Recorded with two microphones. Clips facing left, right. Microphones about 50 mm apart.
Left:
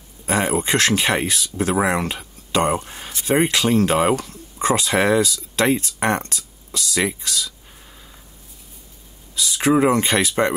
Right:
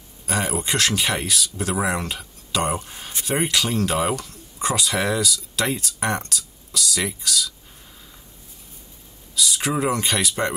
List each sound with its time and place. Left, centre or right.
0.3 s speech: left
9.3 s speech: left